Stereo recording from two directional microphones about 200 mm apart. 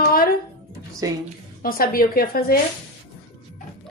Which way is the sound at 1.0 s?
15° right (ahead or behind).